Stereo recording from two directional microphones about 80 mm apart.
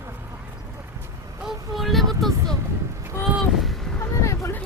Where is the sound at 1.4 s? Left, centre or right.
Centre.